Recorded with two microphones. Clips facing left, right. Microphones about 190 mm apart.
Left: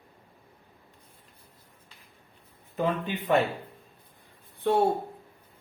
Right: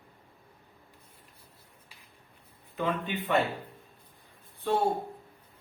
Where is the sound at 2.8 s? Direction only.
40° left (ahead or behind).